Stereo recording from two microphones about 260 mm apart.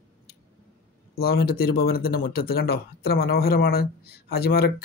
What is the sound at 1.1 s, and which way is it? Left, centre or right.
Speech, left.